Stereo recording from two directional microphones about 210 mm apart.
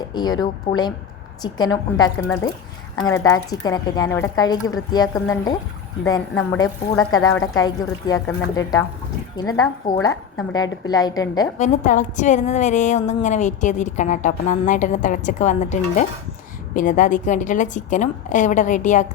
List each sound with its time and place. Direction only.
0.1 s a woman's voice: 20° left (ahead or behind)
0.7 s a woman's voice: 40° left (ahead or behind)
1.4 s a woman's voice: 20° left (ahead or behind)
11.5 s a woman's voice: 35° left (ahead or behind)